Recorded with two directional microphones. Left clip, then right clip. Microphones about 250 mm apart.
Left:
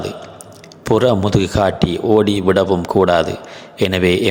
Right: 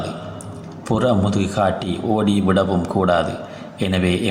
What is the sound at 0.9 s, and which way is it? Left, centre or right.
A man's voice, left.